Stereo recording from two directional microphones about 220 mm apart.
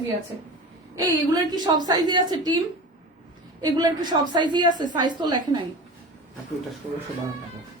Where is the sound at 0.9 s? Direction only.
20° right (ahead or behind).